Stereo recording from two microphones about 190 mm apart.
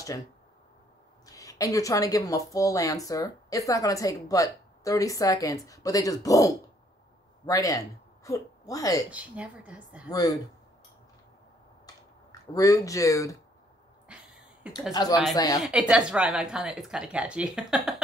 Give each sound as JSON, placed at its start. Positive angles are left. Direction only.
{"t": 1.2, "sound": "a woman's voice", "side_deg": 20}
{"t": 9.1, "sound": "a woman's voice", "side_deg": -5}
{"t": 10.0, "sound": "speech", "side_deg": 20}
{"t": 11.8, "sound": "a sound", "side_deg": 15}
{"t": 14.0, "sound": "a sound", "side_deg": -5}
{"t": 15.0, "sound": "speech", "side_deg": 20}
{"t": 15.9, "sound": "speech", "side_deg": -5}